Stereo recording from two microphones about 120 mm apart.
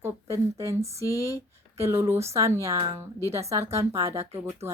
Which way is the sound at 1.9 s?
25° right (ahead or behind).